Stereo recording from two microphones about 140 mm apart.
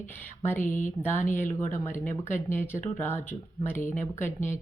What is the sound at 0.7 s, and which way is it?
Speech, 65° left (ahead or behind).